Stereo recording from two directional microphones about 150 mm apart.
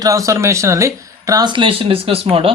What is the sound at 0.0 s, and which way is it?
Speech, 20° right (ahead or behind).